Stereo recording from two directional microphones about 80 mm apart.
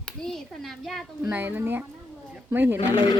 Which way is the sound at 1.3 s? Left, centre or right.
Right.